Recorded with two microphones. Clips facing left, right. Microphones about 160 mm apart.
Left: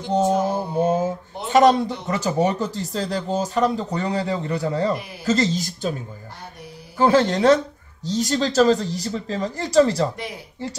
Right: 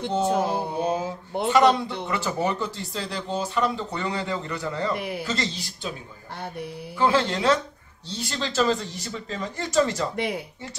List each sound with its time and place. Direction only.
0.1 s a sound: 45° left (ahead or behind)
1.5 s speech: 45° left (ahead or behind)
4.9 s speech: 60° right (ahead or behind)
5.2 s speech: 45° left (ahead or behind)
7.0 s speech: 40° left (ahead or behind)
10.1 s speech: 65° right (ahead or behind)